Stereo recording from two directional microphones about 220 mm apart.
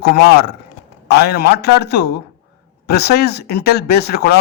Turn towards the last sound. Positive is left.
turn(degrees=45)  # may be behind; listen again after turning